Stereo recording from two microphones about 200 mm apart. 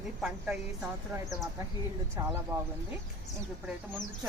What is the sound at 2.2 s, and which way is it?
Speech, 20° right (ahead or behind).